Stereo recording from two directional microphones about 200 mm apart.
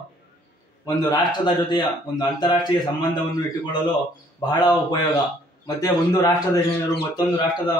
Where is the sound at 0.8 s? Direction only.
20° left (ahead or behind).